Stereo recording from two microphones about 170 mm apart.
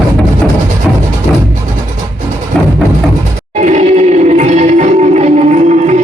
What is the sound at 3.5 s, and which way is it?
Music, 40° right (ahead or behind).